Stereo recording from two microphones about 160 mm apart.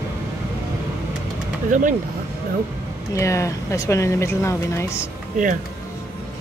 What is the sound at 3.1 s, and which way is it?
Speech, 20° left (ahead or behind).